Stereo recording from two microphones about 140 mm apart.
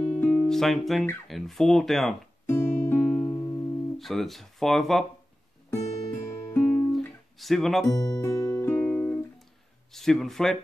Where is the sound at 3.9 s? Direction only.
Centre (ahead or behind).